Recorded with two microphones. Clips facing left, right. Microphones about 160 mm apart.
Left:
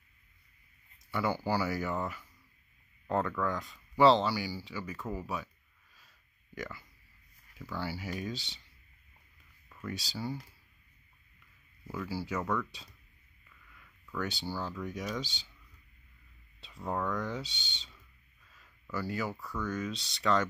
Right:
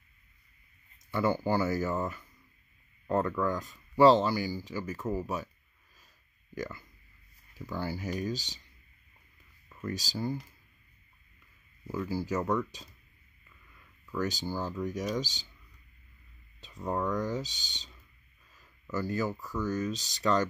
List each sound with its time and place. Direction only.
1.1 s speech: 50° right (ahead or behind)
6.6 s speech: 45° right (ahead or behind)
9.8 s speech: 40° right (ahead or behind)
12.1 s speech: 45° right (ahead or behind)
13.7 s a sound: 40° right (ahead or behind)
14.8 s speech: 40° right (ahead or behind)
17.0 s speech: 40° right (ahead or behind)
18.6 s a sound: 45° right (ahead or behind)
19.5 s speech: 40° right (ahead or behind)